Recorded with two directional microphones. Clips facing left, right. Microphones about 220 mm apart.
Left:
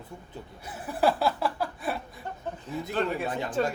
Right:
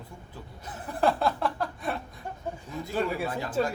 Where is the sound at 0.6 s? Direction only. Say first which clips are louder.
Left 1 dB; 10° left (ahead or behind).